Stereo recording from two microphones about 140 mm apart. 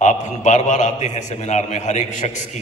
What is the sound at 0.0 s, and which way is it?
A man's voice, 55° left (ahead or behind).